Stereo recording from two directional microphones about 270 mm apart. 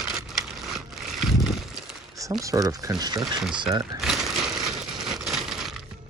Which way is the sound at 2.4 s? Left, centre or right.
Centre.